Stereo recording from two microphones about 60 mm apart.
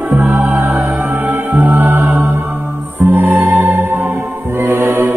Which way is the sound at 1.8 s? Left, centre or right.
Right.